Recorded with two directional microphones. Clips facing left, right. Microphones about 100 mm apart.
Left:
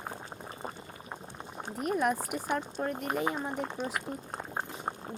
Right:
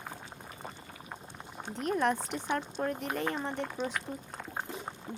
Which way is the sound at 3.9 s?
35° left (ahead or behind).